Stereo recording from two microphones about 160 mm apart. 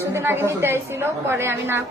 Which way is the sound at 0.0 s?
15° right (ahead or behind).